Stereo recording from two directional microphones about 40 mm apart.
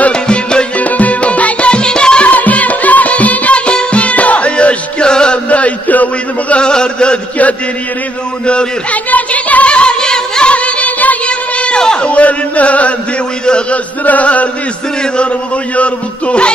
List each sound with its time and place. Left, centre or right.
0.1 s music: left
0.7 s music: left
2.2 s music: left
5.5 s a sound: left
6.6 s chant: left
8.9 s music: left; by 10.5 s centre
10.5 s music: left
11.2 s a sound: left
13.5 s a sound: left
14.0 s chant: left
15.7 s music: left